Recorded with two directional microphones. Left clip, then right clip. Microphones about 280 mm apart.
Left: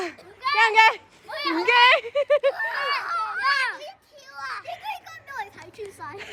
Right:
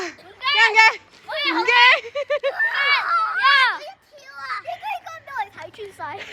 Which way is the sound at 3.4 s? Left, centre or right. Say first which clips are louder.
Right 8 dB; centre.